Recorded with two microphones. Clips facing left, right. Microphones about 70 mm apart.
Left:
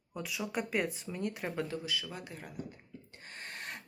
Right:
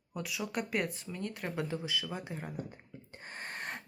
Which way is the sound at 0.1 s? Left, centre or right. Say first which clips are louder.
Even; centre.